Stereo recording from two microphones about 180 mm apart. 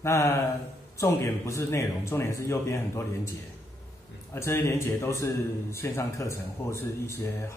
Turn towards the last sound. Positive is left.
turn(degrees=15)  # may be behind; listen again after turning